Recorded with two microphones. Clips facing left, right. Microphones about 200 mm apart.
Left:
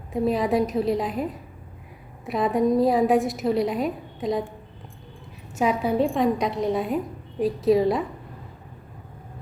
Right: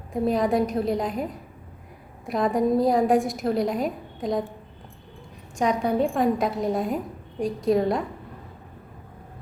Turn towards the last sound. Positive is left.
turn(degrees=0)  # may be behind; listen again after turning